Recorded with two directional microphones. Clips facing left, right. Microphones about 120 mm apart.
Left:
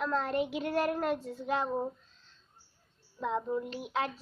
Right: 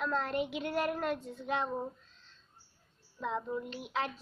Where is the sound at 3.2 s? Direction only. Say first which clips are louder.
Left 3 dB; 5° left (ahead or behind).